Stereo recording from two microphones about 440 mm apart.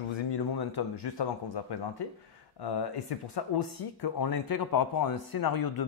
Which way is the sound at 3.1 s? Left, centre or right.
Left.